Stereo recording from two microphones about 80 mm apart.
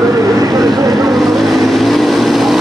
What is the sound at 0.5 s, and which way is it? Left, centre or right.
Vehicle, right.